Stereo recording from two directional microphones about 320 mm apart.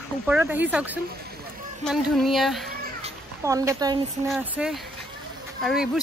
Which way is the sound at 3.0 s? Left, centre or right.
Centre.